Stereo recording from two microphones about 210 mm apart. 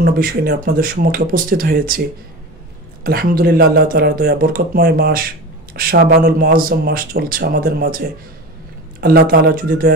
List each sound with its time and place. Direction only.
0.0 s speech: 45° right (ahead or behind)
3.0 s speech: 45° right (ahead or behind)
9.0 s speech: 45° right (ahead or behind)